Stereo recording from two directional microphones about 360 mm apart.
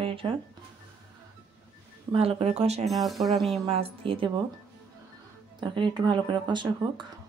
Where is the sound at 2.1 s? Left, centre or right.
Centre.